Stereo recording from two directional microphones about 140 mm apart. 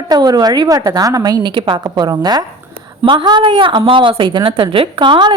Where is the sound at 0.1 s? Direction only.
30° right (ahead or behind).